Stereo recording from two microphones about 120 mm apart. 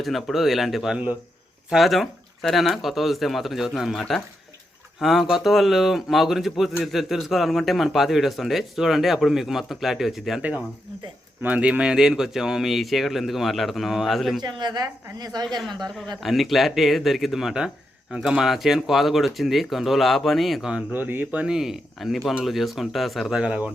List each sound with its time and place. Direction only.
0.0 s speech: centre (ahead or behind)
14.4 s a woman's voice: 35° right (ahead or behind)
15.4 s speech: centre (ahead or behind); by 21.4 s 15° right (ahead or behind)
21.4 s speech: 5° right (ahead or behind)